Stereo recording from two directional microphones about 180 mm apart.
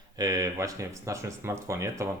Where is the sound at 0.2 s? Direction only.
20° right (ahead or behind).